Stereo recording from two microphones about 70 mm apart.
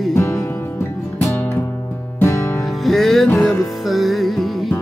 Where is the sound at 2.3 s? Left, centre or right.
Left.